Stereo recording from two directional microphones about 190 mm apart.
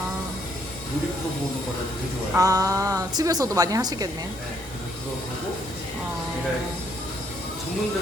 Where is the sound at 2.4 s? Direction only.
20° right (ahead or behind).